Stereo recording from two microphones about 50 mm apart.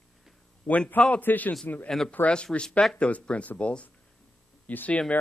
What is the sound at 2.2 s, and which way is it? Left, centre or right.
Speech, left.